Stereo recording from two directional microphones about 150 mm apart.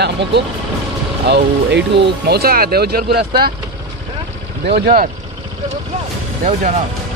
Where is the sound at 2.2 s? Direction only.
90° right.